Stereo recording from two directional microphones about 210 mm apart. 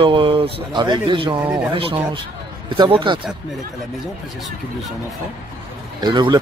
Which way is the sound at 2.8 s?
25° right (ahead or behind).